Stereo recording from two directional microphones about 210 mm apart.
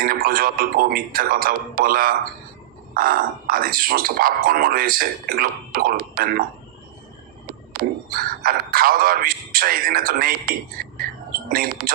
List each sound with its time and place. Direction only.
0.0 s speech: 45° right (ahead or behind)
7.7 s speech: 45° right (ahead or behind)